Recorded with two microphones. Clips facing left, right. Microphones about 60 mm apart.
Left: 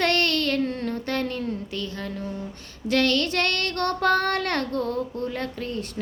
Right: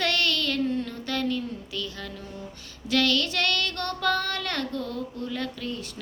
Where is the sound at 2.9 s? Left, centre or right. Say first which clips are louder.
Left 2 dB; left.